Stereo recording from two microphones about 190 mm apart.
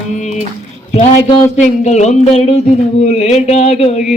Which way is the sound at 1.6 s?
40° left (ahead or behind).